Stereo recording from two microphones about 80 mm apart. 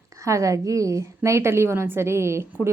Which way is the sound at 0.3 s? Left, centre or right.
Right.